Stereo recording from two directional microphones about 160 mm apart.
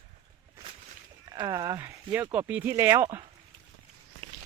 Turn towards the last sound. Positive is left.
turn(degrees=-20)  # may be behind; listen again after turning